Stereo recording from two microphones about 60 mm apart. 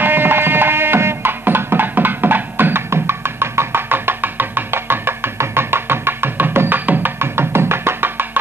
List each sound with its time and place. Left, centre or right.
0.0 s music: right